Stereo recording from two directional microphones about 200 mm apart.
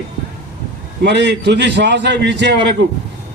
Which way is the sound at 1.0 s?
60° right (ahead or behind).